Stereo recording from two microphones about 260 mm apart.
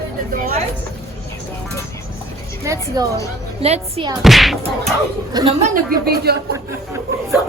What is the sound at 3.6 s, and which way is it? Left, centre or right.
Speech, right.